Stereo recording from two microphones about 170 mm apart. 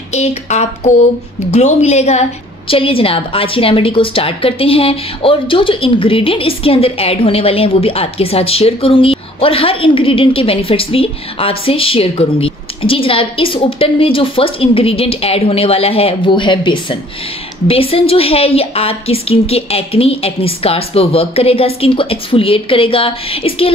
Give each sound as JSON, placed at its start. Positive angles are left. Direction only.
{"t": 0.1, "sound": "a woman's voice", "side_deg": 40}